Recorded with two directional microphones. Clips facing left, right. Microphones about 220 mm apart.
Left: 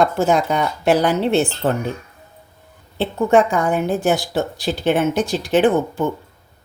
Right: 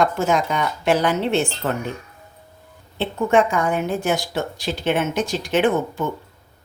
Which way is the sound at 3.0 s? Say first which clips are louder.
Left 3 dB; 35° left (ahead or behind).